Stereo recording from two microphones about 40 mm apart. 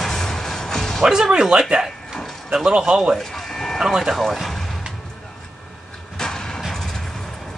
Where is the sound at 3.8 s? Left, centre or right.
Centre.